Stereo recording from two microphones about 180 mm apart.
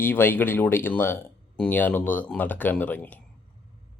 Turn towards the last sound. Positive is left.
turn(degrees=10)  # may be behind; listen again after turning